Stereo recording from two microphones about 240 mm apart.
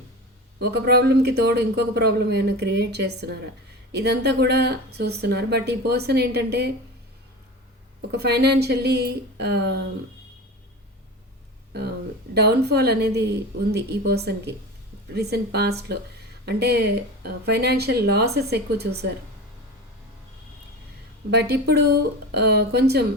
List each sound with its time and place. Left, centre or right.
0.6 s a man's voice: right
8.1 s a man's voice: right
12.3 s a man's voice: right
21.2 s a man's voice: right